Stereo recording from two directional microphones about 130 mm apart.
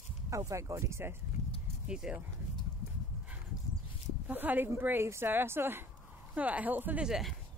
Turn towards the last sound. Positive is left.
turn(degrees=0)  # may be behind; listen again after turning